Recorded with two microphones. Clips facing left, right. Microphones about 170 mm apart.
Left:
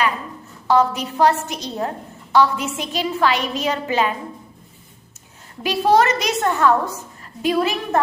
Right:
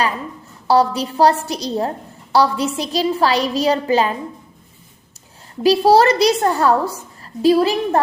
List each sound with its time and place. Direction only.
0.7 s a woman's voice: 35° right (ahead or behind)
5.6 s a woman's voice: 35° right (ahead or behind)